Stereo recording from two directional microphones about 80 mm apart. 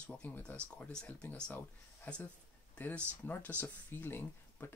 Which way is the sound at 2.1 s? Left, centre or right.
Left.